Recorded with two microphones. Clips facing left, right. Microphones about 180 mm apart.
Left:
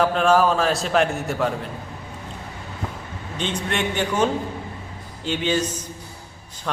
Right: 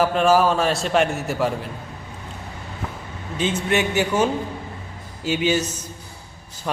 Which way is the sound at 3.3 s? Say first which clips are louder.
Right 4 dB; 5° right (ahead or behind).